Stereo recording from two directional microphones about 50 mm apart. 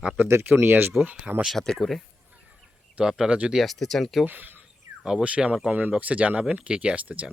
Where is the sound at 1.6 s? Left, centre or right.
Centre.